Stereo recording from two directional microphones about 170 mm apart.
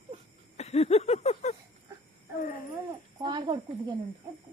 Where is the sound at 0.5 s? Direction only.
40° left (ahead or behind).